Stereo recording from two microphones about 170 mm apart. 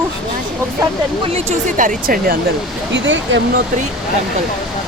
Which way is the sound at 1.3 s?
40° right (ahead or behind).